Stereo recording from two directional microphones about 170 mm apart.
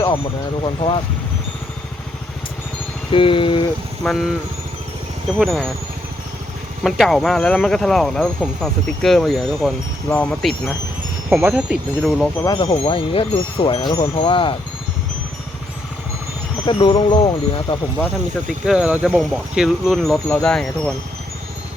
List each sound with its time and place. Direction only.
0.6 s speech: 30° left (ahead or behind)
3.1 s speech: 30° left (ahead or behind)
4.0 s speech: centre (ahead or behind)
5.4 s speech: centre (ahead or behind)
6.8 s speech: centre (ahead or behind)
11.3 s speech: 5° right (ahead or behind)
12.5 s speech: 30° left (ahead or behind)
16.6 s speech: 30° left (ahead or behind)
18.4 s speech: 5° right (ahead or behind)